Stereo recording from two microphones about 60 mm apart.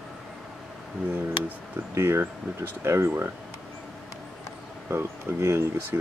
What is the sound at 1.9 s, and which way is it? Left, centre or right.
Speech, right.